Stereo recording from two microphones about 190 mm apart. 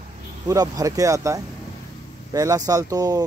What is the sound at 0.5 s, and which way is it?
A man's voice, 20° right (ahead or behind).